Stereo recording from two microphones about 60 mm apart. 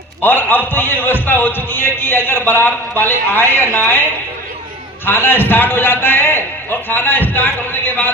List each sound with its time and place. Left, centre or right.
0.2 s a man's voice: left
5.0 s a man's voice: left